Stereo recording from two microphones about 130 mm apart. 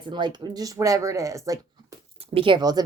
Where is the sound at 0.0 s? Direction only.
35° right (ahead or behind).